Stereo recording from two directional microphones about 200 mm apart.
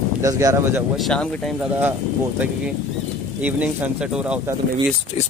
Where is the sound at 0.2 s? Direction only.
15° right (ahead or behind).